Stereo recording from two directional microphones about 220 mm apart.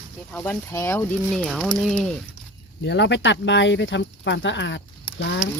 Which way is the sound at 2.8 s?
50° left (ahead or behind).